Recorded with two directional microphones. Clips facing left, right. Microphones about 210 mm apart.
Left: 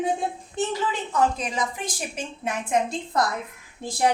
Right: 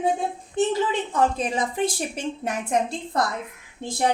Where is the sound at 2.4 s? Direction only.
40° right (ahead or behind).